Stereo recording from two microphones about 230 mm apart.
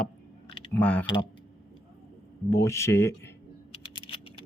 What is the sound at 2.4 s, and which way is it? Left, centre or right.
Speech, centre.